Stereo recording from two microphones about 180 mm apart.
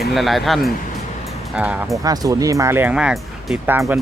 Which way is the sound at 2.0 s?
20° right (ahead or behind).